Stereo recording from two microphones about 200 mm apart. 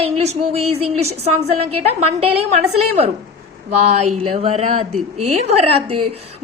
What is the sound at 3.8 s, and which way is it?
A woman's voice, 30° right (ahead or behind).